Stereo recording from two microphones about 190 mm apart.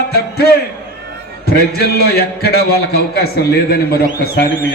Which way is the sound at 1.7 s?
55° left (ahead or behind).